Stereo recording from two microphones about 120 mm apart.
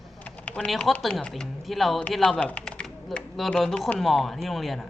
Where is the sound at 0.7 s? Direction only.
Centre (ahead or behind).